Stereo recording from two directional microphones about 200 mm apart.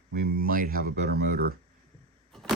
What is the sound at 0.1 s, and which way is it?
Speech, 50° right (ahead or behind).